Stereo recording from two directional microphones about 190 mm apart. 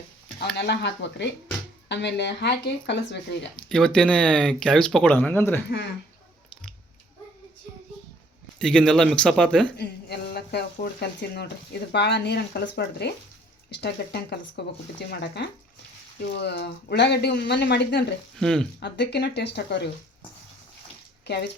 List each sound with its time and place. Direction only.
0.5 s speech: 65° left (ahead or behind)
3.5 s speech: 5° left (ahead or behind)
8.5 s speech: 5° left (ahead or behind)
9.7 s a sound: 60° left (ahead or behind)
11.0 s speech: 60° left (ahead or behind)
18.3 s speech: 5° left (ahead or behind)
18.8 s speech: 60° left (ahead or behind)
21.2 s speech: 60° left (ahead or behind)